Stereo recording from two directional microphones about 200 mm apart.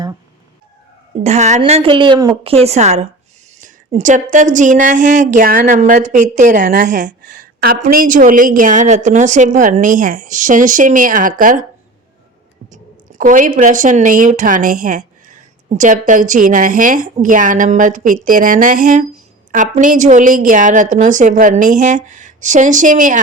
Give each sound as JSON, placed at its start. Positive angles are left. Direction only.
{"t": 1.2, "sound": "a woman's voice", "side_deg": -35}
{"t": 12.7, "sound": "a woman's voice", "side_deg": -40}